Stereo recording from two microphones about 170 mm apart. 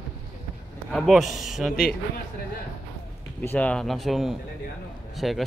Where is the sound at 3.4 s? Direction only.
10° left (ahead or behind).